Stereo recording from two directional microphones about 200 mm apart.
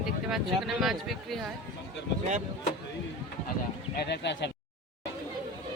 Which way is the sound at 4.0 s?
55° left (ahead or behind).